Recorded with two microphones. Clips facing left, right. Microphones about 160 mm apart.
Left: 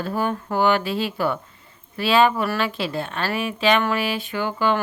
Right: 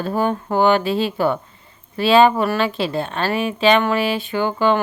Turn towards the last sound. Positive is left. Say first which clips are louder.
# right 4 dB
turn(degrees=-25)  # may be behind; listen again after turning